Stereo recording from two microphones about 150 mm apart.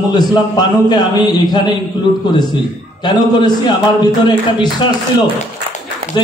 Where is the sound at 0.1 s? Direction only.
30° left (ahead or behind).